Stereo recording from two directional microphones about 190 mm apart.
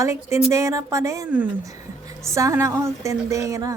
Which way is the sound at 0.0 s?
15° right (ahead or behind).